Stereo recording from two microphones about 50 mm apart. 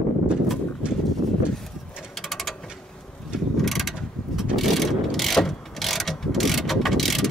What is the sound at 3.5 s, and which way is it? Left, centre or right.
Mechanisms, centre.